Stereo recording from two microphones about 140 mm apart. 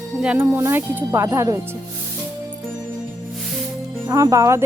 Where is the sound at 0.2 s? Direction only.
10° right (ahead or behind).